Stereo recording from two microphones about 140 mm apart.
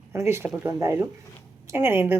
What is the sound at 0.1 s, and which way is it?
A woman's voice, 20° right (ahead or behind).